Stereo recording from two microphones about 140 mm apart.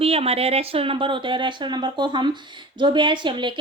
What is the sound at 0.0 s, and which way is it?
A woman's voice, 45° right (ahead or behind).